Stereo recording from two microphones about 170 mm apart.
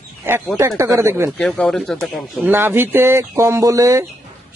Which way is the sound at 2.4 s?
10° right (ahead or behind).